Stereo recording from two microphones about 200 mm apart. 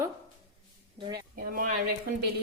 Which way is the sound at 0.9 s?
25° right (ahead or behind).